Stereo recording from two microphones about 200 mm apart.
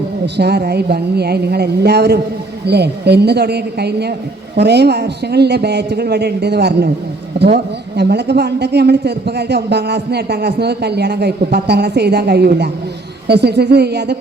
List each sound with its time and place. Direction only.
0.3 s a man's voice: 55° right (ahead or behind)